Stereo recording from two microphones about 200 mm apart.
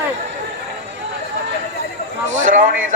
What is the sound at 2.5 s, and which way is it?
Speech, 40° right (ahead or behind).